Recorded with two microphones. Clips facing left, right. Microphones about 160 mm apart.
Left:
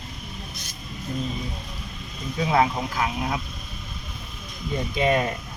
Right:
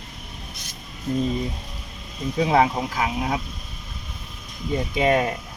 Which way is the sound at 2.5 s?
15° right (ahead or behind).